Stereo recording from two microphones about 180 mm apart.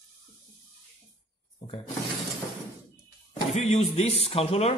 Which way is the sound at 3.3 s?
35° left (ahead or behind).